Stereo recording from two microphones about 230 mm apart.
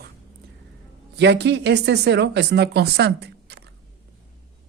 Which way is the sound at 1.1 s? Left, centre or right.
Right.